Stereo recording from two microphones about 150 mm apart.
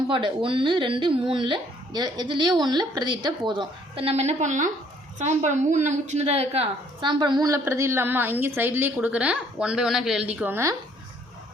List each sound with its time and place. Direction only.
0.1 s a woman's voice: 35° right (ahead or behind); by 10.8 s 15° right (ahead or behind)